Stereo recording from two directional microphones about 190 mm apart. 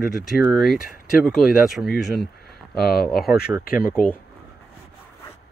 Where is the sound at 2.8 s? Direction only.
55° left (ahead or behind).